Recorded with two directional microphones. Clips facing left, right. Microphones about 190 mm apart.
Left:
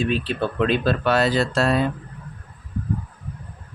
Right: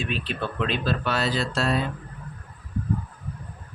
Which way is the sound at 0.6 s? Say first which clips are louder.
Left 6 dB; 55° left (ahead or behind).